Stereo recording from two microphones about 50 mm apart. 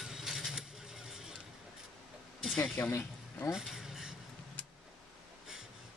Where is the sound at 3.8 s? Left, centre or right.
Centre.